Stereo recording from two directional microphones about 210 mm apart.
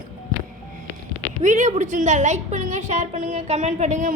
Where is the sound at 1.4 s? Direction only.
35° right (ahead or behind).